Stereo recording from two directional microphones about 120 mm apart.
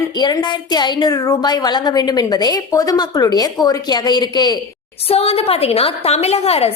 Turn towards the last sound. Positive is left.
turn(degrees=60)  # may be behind; listen again after turning